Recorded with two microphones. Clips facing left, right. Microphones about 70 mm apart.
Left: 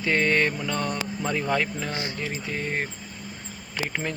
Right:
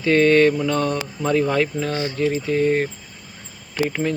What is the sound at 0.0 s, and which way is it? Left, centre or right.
Speech, centre.